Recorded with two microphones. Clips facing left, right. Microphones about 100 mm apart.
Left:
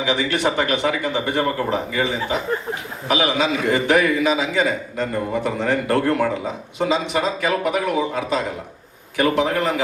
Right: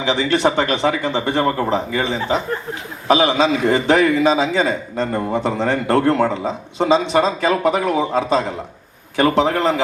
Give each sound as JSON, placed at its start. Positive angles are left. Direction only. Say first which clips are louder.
{"t": 0.0, "sound": "a man's voice", "louder": "right 3 dB", "side_deg": -25}